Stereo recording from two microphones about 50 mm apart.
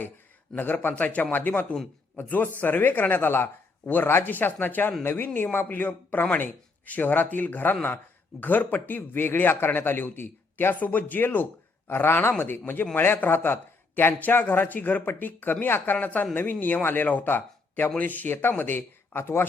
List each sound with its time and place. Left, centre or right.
0.5 s a man's voice: left
19.2 s speech: left